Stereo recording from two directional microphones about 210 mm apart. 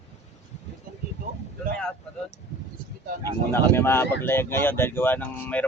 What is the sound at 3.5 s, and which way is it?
Speech, 10° left (ahead or behind).